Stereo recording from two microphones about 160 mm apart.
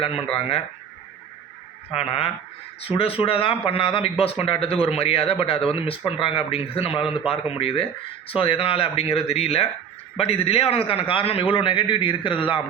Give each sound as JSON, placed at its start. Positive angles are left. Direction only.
{"t": 0.0, "sound": "speech", "side_deg": 35}
{"t": 1.9, "sound": "speech", "side_deg": 40}